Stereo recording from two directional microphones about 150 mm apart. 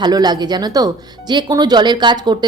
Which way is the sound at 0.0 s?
25° right (ahead or behind).